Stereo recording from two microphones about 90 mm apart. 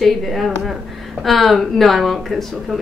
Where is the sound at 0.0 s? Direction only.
Centre (ahead or behind).